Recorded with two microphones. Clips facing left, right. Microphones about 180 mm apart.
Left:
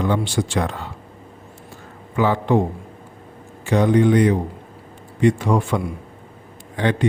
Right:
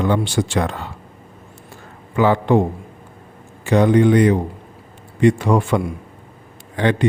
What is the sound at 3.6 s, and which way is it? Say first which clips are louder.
A man's voice: right 2 dB; 65° right (ahead or behind).